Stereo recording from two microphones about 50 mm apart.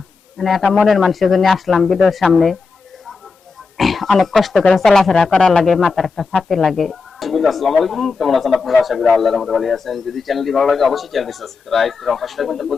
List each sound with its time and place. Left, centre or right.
0.3 s speech: centre
3.8 s a sound: centre
4.2 s speech: centre
5.1 s speech: centre